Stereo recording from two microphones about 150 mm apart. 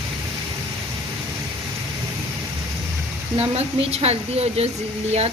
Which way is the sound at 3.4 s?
40° right (ahead or behind).